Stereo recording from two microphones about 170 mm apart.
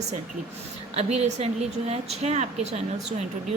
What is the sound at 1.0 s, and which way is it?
A woman's voice, 40° right (ahead or behind).